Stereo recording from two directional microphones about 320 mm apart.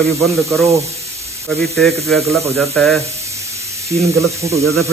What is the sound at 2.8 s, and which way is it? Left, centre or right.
A man's voice, centre.